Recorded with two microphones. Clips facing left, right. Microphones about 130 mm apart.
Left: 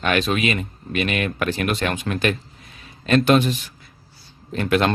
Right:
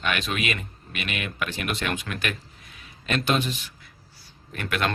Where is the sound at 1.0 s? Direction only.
45° left (ahead or behind).